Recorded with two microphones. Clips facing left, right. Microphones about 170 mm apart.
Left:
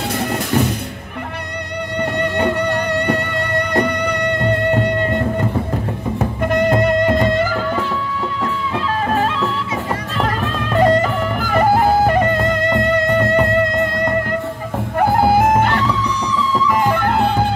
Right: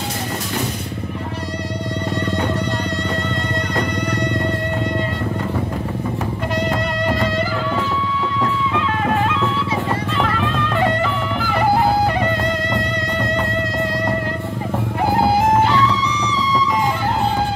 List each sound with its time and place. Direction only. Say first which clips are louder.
2.1 s music: left 3 dB; 60° left (ahead or behind)
6.5 s music: left 8 dB; 55° left (ahead or behind)
8.7 s music: left 3 dB; 35° left (ahead or behind); by 13.5 s 55° left (ahead or behind)
15.0 s music: left 3 dB; 55° left (ahead or behind)